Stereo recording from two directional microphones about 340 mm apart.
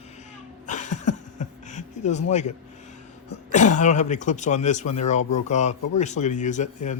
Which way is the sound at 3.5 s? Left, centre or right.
Left.